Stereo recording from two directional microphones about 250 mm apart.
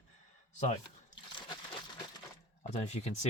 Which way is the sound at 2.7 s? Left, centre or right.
Left.